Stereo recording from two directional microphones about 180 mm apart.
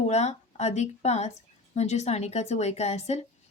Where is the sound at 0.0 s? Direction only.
40° left (ahead or behind).